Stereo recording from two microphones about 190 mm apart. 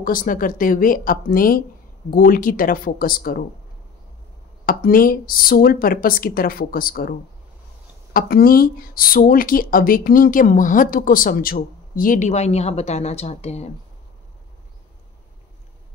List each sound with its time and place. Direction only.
0.0 s speech: 45° left (ahead or behind)
4.6 s speech: 50° left (ahead or behind)